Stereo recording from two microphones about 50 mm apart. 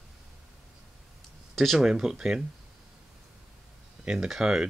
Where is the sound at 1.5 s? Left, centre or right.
Centre.